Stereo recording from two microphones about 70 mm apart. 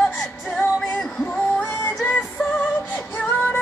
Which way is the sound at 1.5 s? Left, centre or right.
Left.